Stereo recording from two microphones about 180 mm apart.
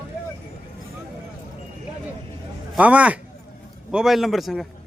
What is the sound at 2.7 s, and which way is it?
A man's voice, 5° right (ahead or behind).